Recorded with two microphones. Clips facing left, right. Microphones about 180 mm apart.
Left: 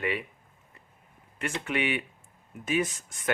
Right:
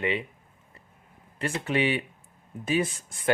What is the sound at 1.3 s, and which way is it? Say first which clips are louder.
Speech: right 4 dB; 35° right (ahead or behind).